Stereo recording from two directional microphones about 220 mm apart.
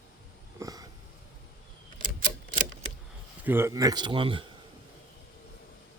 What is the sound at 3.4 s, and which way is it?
Speech, 10° right (ahead or behind).